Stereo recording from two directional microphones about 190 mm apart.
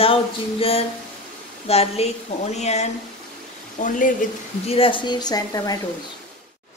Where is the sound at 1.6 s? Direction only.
30° left (ahead or behind).